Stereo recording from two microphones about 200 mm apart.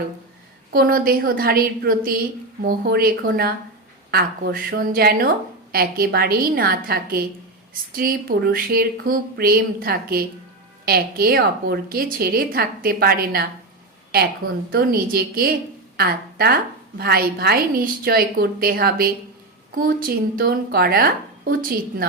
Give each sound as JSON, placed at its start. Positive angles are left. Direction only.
{"t": 0.7, "sound": "a woman's voice", "side_deg": -45}
{"t": 14.7, "sound": "a woman's voice", "side_deg": -50}